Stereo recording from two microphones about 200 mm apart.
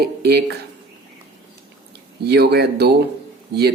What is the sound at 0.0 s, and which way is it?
Speech, 55° right (ahead or behind).